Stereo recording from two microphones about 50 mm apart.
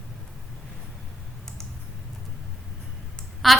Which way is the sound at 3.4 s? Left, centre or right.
Centre.